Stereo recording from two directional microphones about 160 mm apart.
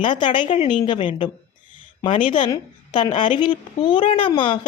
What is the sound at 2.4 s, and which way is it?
A woman's voice, 30° left (ahead or behind).